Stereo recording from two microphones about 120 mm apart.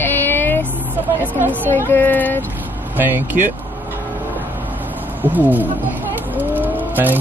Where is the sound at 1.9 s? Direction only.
15° left (ahead or behind).